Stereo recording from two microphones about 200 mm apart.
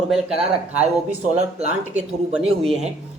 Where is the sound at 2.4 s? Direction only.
30° right (ahead or behind).